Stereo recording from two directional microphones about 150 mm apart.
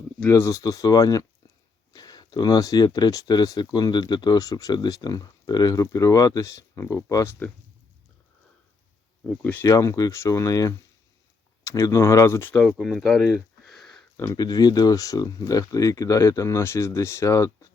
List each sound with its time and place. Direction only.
0.3 s speech: 20° left (ahead or behind)
9.2 s speech: 10° left (ahead or behind)
9.6 s speech: 20° left (ahead or behind)
12.5 s speech: centre (ahead or behind)
14.2 s speech: 20° left (ahead or behind)